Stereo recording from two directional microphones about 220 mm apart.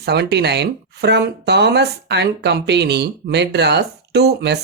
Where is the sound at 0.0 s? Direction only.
50° right (ahead or behind).